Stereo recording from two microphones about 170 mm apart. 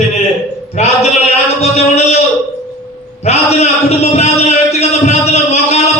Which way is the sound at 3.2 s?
40° left (ahead or behind).